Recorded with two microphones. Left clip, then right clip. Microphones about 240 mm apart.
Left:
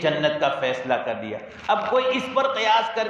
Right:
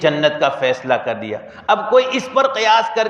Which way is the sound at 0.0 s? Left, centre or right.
Right.